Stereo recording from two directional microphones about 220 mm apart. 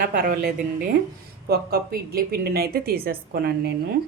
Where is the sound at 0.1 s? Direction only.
40° right (ahead or behind).